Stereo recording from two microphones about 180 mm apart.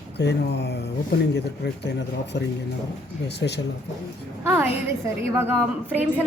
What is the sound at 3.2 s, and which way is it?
Speech, 70° left (ahead or behind).